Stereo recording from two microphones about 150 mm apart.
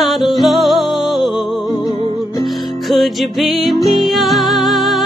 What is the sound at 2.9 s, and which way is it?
Music, centre (ahead or behind).